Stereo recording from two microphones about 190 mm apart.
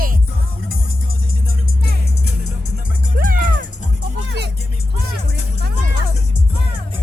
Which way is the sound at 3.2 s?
50° right (ahead or behind).